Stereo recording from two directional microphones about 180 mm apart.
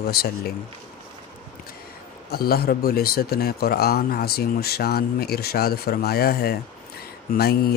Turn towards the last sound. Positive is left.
turn(degrees=60)  # may be behind; listen again after turning